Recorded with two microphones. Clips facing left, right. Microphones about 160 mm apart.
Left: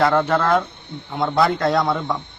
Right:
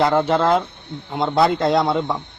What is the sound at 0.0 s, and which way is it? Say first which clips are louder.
Speech: right 1 dB; 20° right (ahead or behind).